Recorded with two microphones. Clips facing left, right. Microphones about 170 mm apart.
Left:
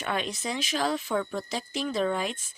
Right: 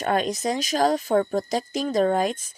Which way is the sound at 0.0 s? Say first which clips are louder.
Right 8 dB; 40° right (ahead or behind).